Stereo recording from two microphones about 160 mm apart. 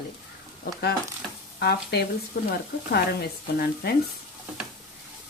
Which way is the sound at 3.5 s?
75° left (ahead or behind).